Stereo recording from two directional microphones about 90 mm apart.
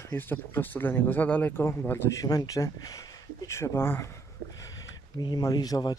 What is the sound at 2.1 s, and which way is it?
Speech, 45° left (ahead or behind).